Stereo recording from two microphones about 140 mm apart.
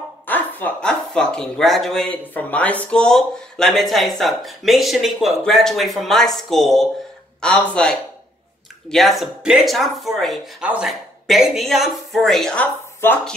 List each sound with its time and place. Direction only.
0.3 s speech: 15° left (ahead or behind)
13.0 s speech: 15° left (ahead or behind)